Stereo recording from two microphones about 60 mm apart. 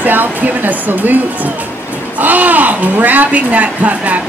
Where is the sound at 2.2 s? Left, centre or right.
Right.